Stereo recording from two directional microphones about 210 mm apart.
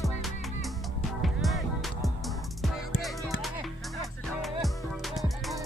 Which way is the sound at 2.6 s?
Centre (ahead or behind).